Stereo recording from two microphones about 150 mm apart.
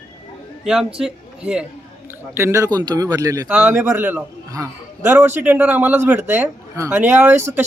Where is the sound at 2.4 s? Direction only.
20° right (ahead or behind).